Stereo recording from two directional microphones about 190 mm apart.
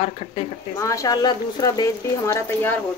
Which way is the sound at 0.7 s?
15° left (ahead or behind).